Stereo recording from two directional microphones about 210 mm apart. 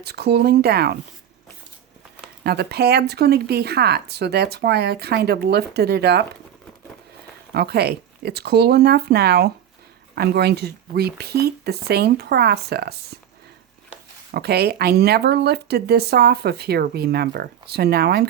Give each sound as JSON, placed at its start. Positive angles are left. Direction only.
{"t": 0.0, "sound": "speech", "side_deg": -50}
{"t": 2.4, "sound": "speech", "side_deg": -50}
{"t": 7.5, "sound": "speech", "side_deg": -50}
{"t": 14.3, "sound": "speech", "side_deg": -50}